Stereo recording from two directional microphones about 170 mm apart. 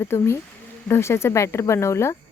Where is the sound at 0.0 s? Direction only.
15° left (ahead or behind).